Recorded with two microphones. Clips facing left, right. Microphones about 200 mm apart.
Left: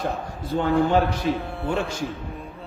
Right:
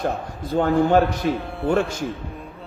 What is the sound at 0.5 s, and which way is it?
Speech, 50° right (ahead or behind).